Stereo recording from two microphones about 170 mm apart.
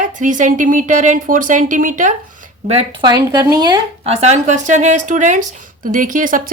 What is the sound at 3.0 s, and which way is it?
Speech, 25° right (ahead or behind).